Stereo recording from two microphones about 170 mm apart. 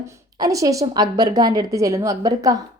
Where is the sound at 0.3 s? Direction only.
20° right (ahead or behind).